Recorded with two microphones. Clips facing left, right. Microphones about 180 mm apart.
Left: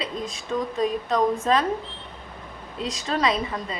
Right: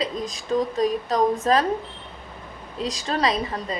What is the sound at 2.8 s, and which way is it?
Speech, 35° right (ahead or behind).